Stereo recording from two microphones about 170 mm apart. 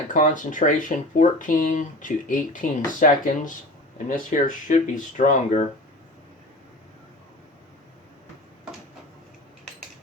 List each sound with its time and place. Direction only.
0.1 s speech: 50° left (ahead or behind)